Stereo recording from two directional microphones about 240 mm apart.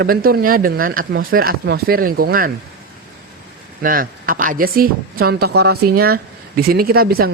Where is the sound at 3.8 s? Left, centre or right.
Right.